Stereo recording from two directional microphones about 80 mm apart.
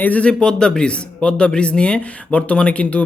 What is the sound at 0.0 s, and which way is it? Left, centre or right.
Speech, centre.